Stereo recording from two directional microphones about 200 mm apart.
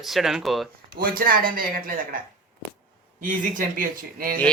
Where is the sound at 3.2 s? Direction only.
45° right (ahead or behind).